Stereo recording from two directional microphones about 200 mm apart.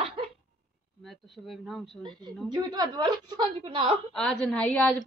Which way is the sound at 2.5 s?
20° right (ahead or behind).